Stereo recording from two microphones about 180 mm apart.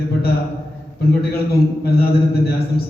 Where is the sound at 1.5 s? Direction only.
60° left (ahead or behind).